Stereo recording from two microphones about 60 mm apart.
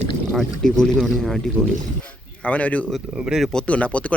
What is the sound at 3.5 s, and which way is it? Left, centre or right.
Speech, centre.